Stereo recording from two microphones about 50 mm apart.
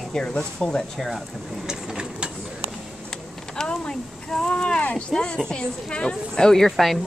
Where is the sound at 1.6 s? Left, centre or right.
Centre.